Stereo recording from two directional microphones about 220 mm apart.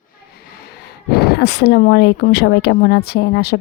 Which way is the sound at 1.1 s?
45° left (ahead or behind).